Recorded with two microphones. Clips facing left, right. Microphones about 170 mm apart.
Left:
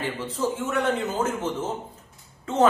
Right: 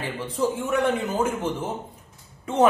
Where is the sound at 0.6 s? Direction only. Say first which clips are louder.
Right 2 dB; 15° right (ahead or behind).